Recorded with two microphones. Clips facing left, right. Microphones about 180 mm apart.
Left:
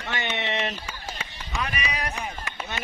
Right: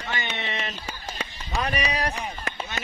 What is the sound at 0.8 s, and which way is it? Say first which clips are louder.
Run: right 2 dB; 35° right (ahead or behind).